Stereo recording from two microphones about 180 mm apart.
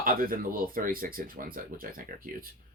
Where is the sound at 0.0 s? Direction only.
50° right (ahead or behind).